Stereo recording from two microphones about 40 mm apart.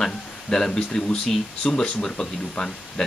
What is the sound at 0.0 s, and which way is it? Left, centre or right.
Speech, centre.